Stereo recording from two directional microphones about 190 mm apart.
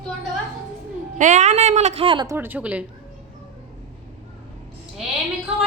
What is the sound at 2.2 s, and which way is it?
Speech, 10° right (ahead or behind).